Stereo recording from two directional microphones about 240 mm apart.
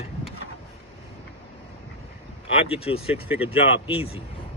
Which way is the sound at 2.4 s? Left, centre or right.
Left.